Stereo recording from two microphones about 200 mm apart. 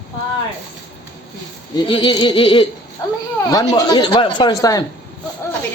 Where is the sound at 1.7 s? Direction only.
25° left (ahead or behind).